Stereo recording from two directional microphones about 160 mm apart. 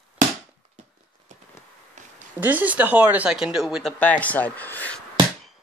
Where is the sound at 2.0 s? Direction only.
50° right (ahead or behind).